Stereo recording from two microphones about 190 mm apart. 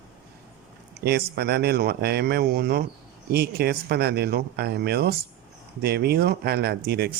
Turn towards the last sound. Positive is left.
turn(degrees=-55)  # may be behind; listen again after turning